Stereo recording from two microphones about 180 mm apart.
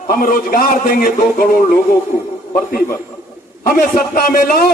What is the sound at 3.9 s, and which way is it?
Speech, 55° left (ahead or behind).